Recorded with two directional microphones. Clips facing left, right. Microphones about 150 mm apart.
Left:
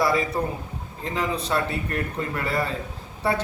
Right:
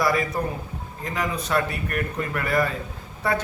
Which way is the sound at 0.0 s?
25° left (ahead or behind).